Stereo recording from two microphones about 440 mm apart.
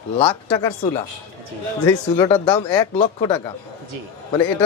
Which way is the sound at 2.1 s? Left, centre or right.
Centre.